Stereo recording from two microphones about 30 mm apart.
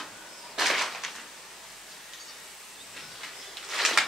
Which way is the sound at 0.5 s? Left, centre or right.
Centre.